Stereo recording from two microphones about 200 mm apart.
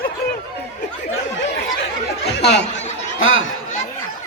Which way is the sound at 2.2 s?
60° left (ahead or behind).